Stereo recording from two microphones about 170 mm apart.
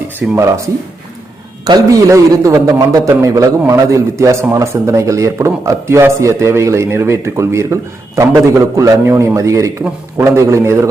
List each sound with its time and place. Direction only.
0.2 s a man's voice: 15° right (ahead or behind)
1.6 s a man's voice: 20° right (ahead or behind)